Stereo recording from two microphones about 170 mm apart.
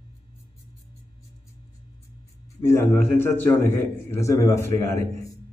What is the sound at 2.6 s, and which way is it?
A man's voice, 15° left (ahead or behind).